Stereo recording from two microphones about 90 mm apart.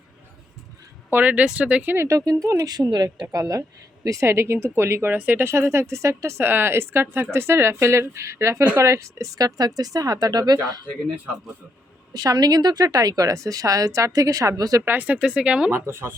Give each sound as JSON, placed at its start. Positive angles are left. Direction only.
{"t": 1.1, "sound": "speech", "side_deg": -15}
{"t": 2.0, "sound": "a woman's voice", "side_deg": -40}
{"t": 5.1, "sound": "speech", "side_deg": -20}
{"t": 12.1, "sound": "a woman's voice", "side_deg": -45}
{"t": 14.8, "sound": "speech", "side_deg": -20}
{"t": 15.7, "sound": "speech", "side_deg": -30}